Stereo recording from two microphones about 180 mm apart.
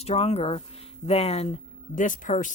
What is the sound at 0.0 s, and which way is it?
Speech, 35° left (ahead or behind).